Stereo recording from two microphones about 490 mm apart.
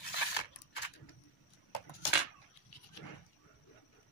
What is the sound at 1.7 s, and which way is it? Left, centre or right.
Cutlery, left.